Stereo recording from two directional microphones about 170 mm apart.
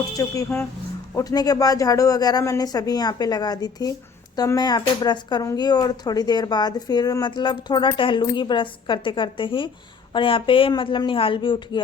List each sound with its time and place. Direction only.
0.2 s speech: 15° left (ahead or behind)